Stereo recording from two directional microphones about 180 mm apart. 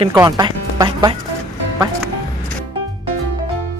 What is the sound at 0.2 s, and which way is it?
Speech, 20° right (ahead or behind).